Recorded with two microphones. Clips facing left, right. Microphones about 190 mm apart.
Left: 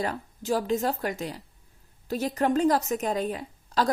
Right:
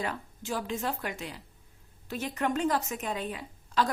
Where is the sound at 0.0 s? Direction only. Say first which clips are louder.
Left 4 dB; 40° left (ahead or behind).